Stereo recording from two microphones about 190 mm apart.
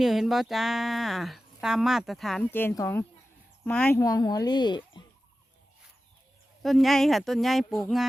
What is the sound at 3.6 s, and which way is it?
Speech, 10° left (ahead or behind).